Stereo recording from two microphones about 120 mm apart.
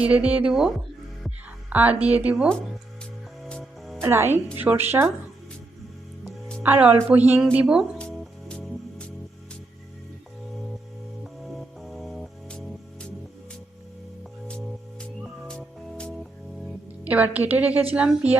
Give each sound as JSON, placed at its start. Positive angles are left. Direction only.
{"t": 0.0, "sound": "a woman's voice", "side_deg": -10}
{"t": 1.7, "sound": "a woman's voice", "side_deg": -15}
{"t": 3.5, "sound": "music", "side_deg": 5}
{"t": 4.0, "sound": "a woman's voice", "side_deg": -20}
{"t": 6.6, "sound": "a woman's voice", "side_deg": -15}
{"t": 7.9, "sound": "music", "side_deg": 5}
{"t": 11.2, "sound": "music", "side_deg": 0}
{"t": 14.4, "sound": "music", "side_deg": 5}
{"t": 17.0, "sound": "a woman's voice", "side_deg": -10}